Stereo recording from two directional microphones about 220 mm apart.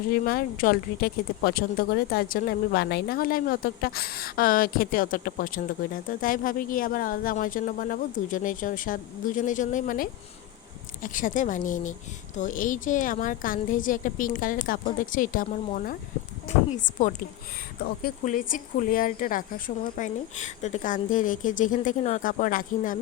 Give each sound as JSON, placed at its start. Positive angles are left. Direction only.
{"t": 0.1, "sound": "speech", "side_deg": 45}